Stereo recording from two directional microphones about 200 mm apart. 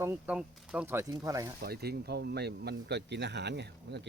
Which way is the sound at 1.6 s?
50° right (ahead or behind).